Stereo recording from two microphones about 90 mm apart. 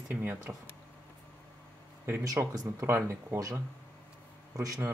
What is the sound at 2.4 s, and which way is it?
Speech, 30° right (ahead or behind).